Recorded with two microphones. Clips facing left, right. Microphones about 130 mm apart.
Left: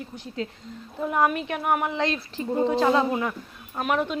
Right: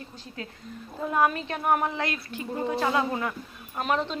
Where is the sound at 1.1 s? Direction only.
15° left (ahead or behind).